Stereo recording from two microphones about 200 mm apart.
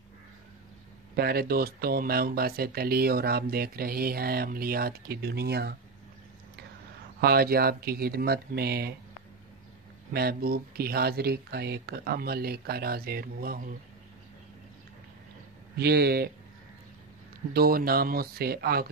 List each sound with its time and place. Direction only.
1.1 s speech: 50° right (ahead or behind)
7.2 s speech: 50° right (ahead or behind)
10.1 s speech: 50° right (ahead or behind)
15.8 s speech: 50° right (ahead or behind)
17.6 s speech: 50° right (ahead or behind)